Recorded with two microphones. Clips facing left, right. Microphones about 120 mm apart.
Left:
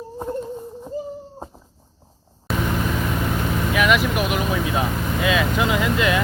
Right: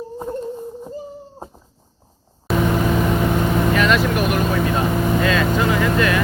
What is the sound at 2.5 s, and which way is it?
Vehicle, centre (ahead or behind).